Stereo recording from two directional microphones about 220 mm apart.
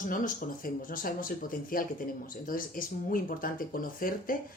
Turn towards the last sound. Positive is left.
turn(degrees=40)  # may be behind; listen again after turning